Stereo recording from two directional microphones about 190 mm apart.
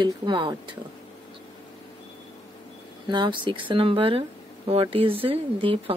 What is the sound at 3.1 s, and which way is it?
Speech, 25° right (ahead or behind).